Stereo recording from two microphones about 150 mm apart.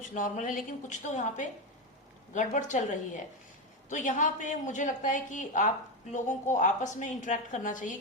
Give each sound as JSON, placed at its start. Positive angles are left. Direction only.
{"t": 0.0, "sound": "a woman's voice", "side_deg": 60}